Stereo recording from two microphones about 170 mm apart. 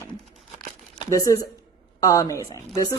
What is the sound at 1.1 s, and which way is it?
Speech, 20° left (ahead or behind).